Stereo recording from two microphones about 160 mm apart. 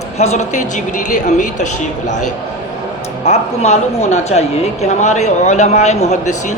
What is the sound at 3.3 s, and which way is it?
Speech, 45° left (ahead or behind).